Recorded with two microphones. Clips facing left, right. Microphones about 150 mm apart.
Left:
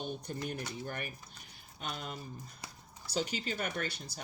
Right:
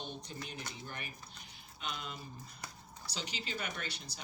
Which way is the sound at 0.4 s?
50° left (ahead or behind).